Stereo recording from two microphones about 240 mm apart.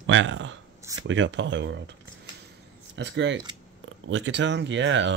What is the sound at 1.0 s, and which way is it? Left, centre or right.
Speech, right.